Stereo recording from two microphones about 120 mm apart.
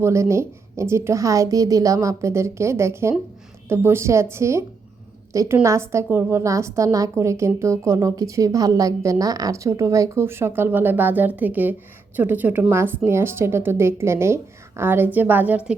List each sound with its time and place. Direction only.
0.0 s a woman's voice: 25° right (ahead or behind)